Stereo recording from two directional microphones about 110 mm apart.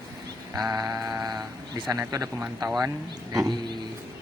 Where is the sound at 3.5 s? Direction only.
40° right (ahead or behind).